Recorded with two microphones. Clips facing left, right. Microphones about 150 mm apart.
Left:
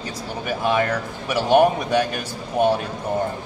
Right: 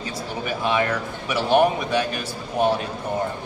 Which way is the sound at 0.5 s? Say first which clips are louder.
Left 2 dB; 45° left (ahead or behind).